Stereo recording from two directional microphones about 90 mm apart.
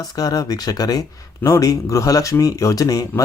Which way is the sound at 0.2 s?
45° left (ahead or behind).